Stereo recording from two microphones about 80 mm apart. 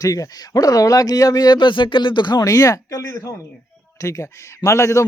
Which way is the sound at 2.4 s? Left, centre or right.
Left.